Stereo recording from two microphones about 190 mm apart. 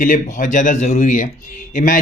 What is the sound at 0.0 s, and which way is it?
Speech, 45° left (ahead or behind).